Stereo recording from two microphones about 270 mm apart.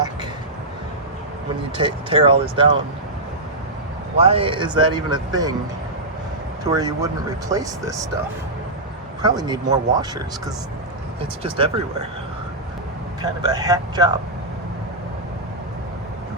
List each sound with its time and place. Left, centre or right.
1.8 s speech: centre
4.2 s speech: right
6.7 s speech: centre
9.2 s speech: centre
13.2 s speech: centre